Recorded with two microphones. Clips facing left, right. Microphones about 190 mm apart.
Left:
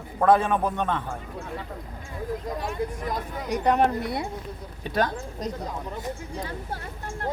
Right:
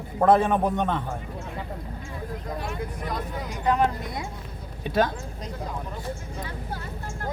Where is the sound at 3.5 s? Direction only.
60° left (ahead or behind).